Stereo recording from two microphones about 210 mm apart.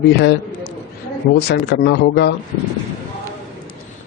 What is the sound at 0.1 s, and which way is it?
Speech, 55° left (ahead or behind).